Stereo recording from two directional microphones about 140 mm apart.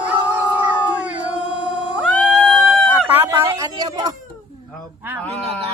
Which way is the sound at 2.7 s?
15° right (ahead or behind).